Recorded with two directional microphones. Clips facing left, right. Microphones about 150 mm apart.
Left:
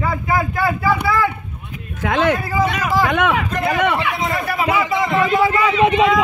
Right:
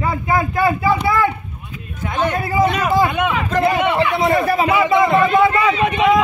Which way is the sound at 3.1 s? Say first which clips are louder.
Left 2 dB; 80° left.